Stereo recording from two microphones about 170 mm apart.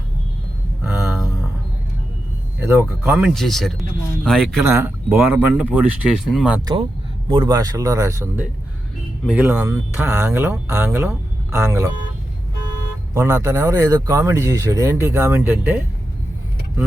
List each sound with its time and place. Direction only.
0.8 s a sound: 5° right (ahead or behind)
2.6 s speech: 15° right (ahead or behind); by 4.6 s 5° left (ahead or behind)
4.6 s speech: 15° right (ahead or behind)
7.3 s speech: 25° right (ahead or behind)
13.1 s speech: 15° right (ahead or behind)